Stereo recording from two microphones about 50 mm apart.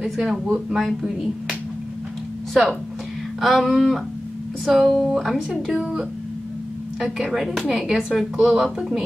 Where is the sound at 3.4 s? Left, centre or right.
Centre.